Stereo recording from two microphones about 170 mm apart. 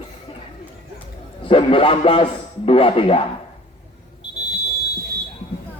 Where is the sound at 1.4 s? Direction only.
30° left (ahead or behind).